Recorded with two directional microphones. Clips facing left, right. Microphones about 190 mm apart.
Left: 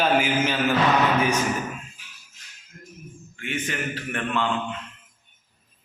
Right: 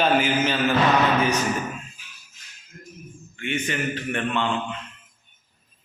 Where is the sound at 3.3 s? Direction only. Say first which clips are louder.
Right 3 dB; centre (ahead or behind).